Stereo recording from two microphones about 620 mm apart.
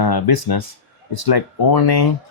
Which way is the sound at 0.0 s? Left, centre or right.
Left.